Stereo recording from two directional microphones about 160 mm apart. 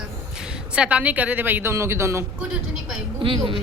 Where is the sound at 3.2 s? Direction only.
35° right (ahead or behind).